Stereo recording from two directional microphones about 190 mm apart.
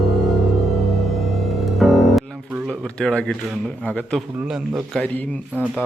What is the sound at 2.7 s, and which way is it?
A man's voice, 5° left (ahead or behind).